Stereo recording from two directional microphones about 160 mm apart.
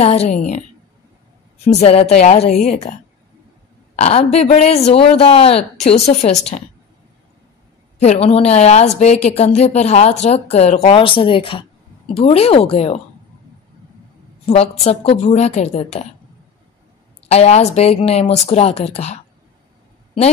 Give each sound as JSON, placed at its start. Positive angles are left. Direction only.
{"t": 0.0, "sound": "a woman's voice", "side_deg": 40}
{"t": 1.7, "sound": "a woman's voice", "side_deg": 40}
{"t": 8.0, "sound": "a woman's voice", "side_deg": 40}
{"t": 14.5, "sound": "a woman's voice", "side_deg": 40}
{"t": 17.3, "sound": "a woman's voice", "side_deg": 40}